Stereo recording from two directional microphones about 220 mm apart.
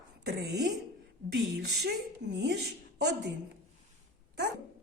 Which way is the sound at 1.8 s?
50° right (ahead or behind).